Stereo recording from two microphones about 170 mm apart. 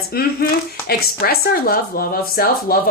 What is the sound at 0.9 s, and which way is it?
Speech, 60° left (ahead or behind).